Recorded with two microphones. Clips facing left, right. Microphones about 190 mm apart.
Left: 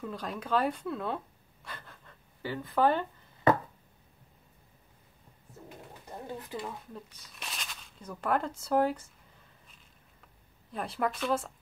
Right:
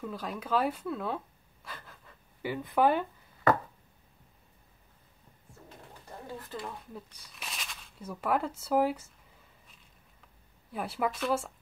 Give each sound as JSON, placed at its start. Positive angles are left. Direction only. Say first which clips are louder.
{"t": 0.0, "sound": "speech", "louder": "even", "side_deg": 0}
{"t": 2.4, "sound": "speech", "louder": "right 1 dB", "side_deg": -15}
{"t": 6.2, "sound": "speech", "louder": "left 2 dB", "side_deg": 20}
{"t": 6.6, "sound": "speech", "louder": "left 1 dB", "side_deg": 0}
{"t": 10.7, "sound": "speech", "louder": "even", "side_deg": -5}